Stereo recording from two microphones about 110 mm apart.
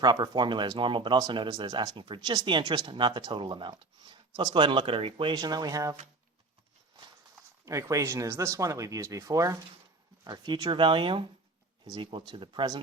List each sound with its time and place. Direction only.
0.0 s speech: 45° right (ahead or behind)
1.5 s speech: 35° right (ahead or behind); by 5.3 s 60° right (ahead or behind)
5.3 s speech: 40° right (ahead or behind)
7.6 s speech: 30° right (ahead or behind)
10.2 s speech: 40° right (ahead or behind)